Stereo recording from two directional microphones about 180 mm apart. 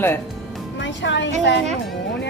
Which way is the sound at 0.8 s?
90° left.